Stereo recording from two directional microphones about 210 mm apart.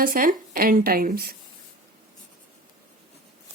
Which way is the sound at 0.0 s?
40° right (ahead or behind).